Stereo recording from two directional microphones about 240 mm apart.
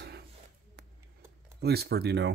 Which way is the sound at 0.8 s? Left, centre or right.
Right.